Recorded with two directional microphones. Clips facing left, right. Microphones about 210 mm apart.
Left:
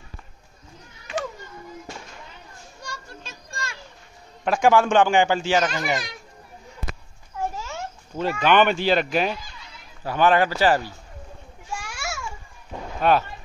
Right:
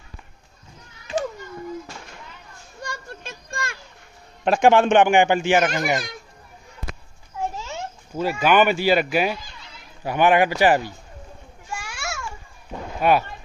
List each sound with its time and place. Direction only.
2.8 s a sound: 55° right (ahead or behind)
4.5 s speech: 25° right (ahead or behind)
5.6 s speech: 50° right (ahead or behind)
7.5 s a sound: 20° right (ahead or behind)
8.2 s speech: 10° right (ahead or behind)
11.7 s children playing: centre (ahead or behind)
13.0 s speech: 10° right (ahead or behind)